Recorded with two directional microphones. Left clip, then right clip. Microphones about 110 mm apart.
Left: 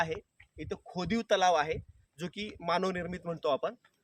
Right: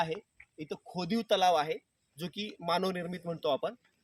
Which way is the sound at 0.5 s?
10° right (ahead or behind).